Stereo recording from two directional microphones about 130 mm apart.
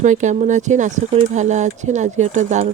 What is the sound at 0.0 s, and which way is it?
Speech, 70° right (ahead or behind).